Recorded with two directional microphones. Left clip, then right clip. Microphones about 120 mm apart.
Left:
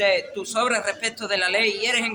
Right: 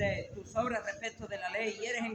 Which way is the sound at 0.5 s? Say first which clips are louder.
Left 11 dB; 50° left (ahead or behind).